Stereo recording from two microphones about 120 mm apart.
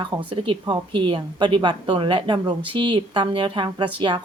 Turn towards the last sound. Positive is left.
turn(degrees=-45)  # may be behind; listen again after turning